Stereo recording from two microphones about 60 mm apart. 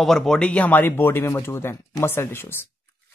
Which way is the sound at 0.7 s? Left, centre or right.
Left.